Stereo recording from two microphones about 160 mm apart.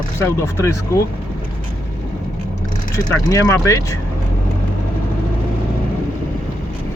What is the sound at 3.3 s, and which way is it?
Speech, 20° left (ahead or behind).